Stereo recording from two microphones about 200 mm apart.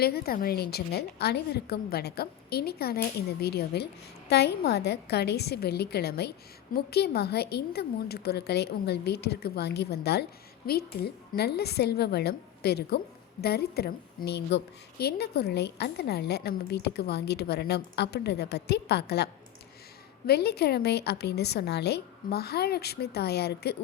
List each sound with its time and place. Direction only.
0.0 s a woman's voice: 50° left (ahead or behind)